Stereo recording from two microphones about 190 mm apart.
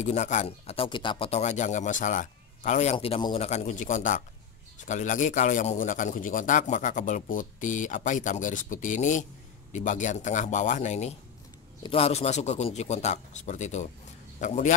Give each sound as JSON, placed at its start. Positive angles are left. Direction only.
{"t": 0.0, "sound": "a man's voice", "side_deg": 40}
{"t": 3.4, "sound": "a man's voice", "side_deg": 35}